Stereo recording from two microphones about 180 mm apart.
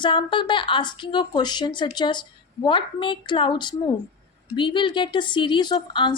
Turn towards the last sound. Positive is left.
turn(degrees=25)  # may be behind; listen again after turning